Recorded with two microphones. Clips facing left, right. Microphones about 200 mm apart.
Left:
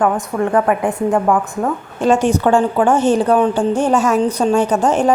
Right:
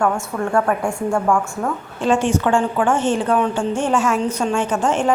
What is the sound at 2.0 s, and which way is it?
A woman's voice, 40° left (ahead or behind).